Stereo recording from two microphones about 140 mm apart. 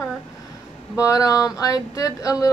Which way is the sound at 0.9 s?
25° left (ahead or behind).